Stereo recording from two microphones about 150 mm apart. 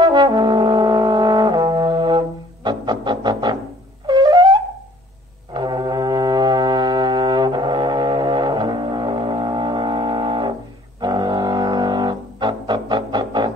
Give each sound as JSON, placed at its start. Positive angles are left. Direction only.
{"t": 0.0, "sound": "brass instrument", "side_deg": -30}
{"t": 5.5, "sound": "brass instrument", "side_deg": -30}
{"t": 11.0, "sound": "music", "side_deg": -30}